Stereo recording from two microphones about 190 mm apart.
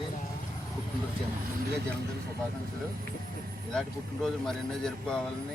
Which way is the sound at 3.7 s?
Centre (ahead or behind).